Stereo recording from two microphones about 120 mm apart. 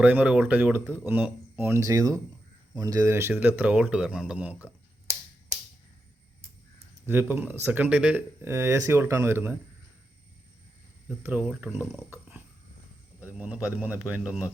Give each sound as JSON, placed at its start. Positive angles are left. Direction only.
{"t": 0.0, "sound": "speech", "side_deg": -15}
{"t": 7.0, "sound": "speech", "side_deg": -20}
{"t": 11.2, "sound": "speech", "side_deg": -15}